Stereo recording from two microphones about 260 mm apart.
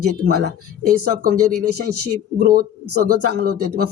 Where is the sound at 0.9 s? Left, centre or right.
Right.